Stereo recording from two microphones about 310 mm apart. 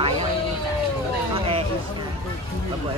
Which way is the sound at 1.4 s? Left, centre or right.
Centre.